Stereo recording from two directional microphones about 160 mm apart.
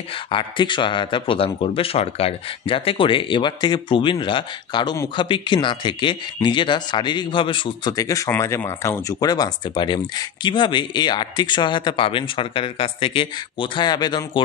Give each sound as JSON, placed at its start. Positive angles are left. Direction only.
{"t": 0.3, "sound": "speech", "side_deg": 30}